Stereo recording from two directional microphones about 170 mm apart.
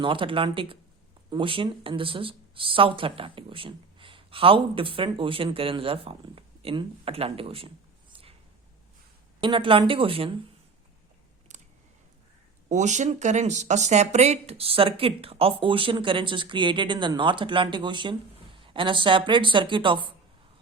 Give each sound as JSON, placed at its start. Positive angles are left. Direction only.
{"t": 0.0, "sound": "speech", "side_deg": -30}
{"t": 9.4, "sound": "speech", "side_deg": -30}
{"t": 12.6, "sound": "speech", "side_deg": -45}